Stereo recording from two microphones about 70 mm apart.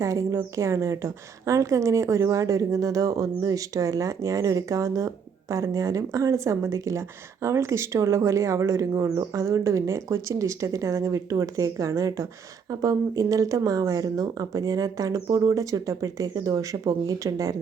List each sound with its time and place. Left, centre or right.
0.0 s speech: right
12.8 s speech: right